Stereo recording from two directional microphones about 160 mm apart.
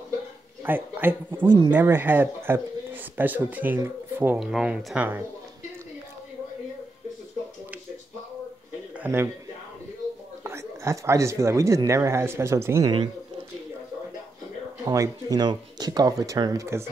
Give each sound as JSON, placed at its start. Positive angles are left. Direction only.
{"t": 0.7, "sound": "speech", "side_deg": -10}
{"t": 8.9, "sound": "a man's voice", "side_deg": -10}
{"t": 10.4, "sound": "speech", "side_deg": -15}
{"t": 14.9, "sound": "speech", "side_deg": -25}